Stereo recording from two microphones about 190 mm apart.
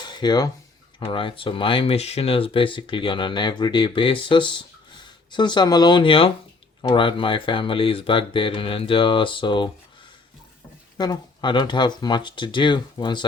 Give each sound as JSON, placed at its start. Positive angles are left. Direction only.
{"t": 0.0, "sound": "dishes", "side_deg": 25}
{"t": 0.9, "sound": "speech", "side_deg": 25}
{"t": 10.9, "sound": "speech", "side_deg": 20}